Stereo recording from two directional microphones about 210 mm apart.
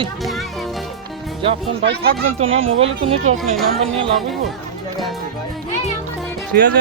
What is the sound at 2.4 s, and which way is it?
Speech, 25° right (ahead or behind).